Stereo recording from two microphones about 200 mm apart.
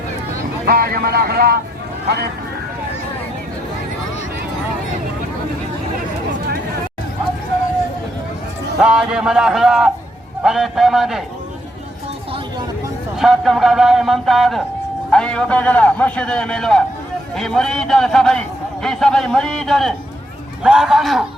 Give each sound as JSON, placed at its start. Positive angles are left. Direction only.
{"t": 0.6, "sound": "speech", "side_deg": -50}
{"t": 8.8, "sound": "a man's voice", "side_deg": -5}
{"t": 13.1, "sound": "a man's voice", "side_deg": 0}